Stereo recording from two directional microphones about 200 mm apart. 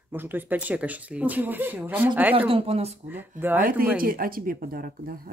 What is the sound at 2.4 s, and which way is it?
Speech, 30° right (ahead or behind).